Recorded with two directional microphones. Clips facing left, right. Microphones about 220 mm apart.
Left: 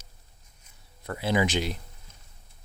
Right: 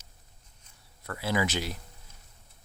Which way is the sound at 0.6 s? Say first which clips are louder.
Left 4 dB; 20° left (ahead or behind).